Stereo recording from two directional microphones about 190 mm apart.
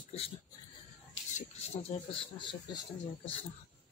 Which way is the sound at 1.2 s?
75° left (ahead or behind).